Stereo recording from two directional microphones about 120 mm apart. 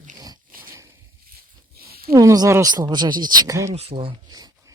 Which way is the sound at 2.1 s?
30° right (ahead or behind).